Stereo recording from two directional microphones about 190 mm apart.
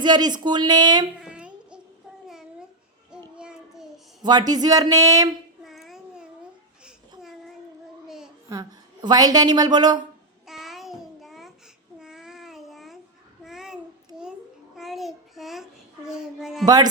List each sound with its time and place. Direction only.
0.0 s speech: 20° right (ahead or behind)
1.2 s a sound: 5° right (ahead or behind)
2.2 s babbling: 5° right (ahead or behind)
3.3 s a sound: 5° right (ahead or behind)
4.2 s speech: 20° right (ahead or behind)
5.6 s babbling: centre (ahead or behind)
7.2 s child singing: centre (ahead or behind)
8.0 s a sound: centre (ahead or behind)
8.4 s a woman's voice: 20° right (ahead or behind)
10.4 s child singing: centre (ahead or behind)
11.9 s a sound: 5° right (ahead or behind)
13.4 s babbling: centre (ahead or behind)
14.8 s child singing: centre (ahead or behind)
16.6 s speech: 20° right (ahead or behind)